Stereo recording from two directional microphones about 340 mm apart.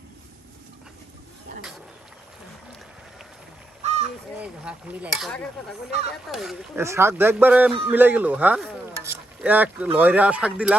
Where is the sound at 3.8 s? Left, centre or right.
Centre.